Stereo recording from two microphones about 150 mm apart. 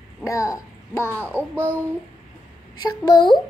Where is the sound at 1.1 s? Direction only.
15° right (ahead or behind).